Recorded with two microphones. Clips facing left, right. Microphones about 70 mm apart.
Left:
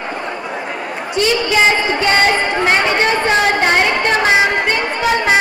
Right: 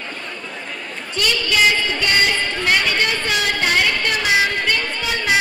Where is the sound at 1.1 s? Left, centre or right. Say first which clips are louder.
Left 5 dB; left.